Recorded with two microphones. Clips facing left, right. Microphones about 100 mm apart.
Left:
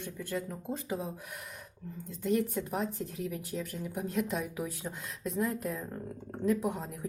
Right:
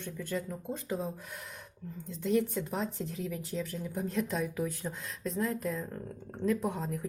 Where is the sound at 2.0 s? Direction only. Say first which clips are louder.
Right 1 dB; centre (ahead or behind).